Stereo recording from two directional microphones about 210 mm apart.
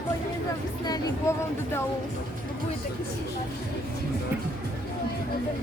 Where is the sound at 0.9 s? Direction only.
15° left (ahead or behind).